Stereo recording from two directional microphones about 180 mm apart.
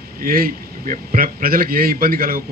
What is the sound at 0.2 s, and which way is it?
A man's voice, 50° right (ahead or behind).